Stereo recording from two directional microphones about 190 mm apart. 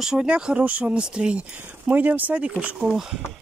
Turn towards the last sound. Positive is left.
turn(degrees=-5)  # may be behind; listen again after turning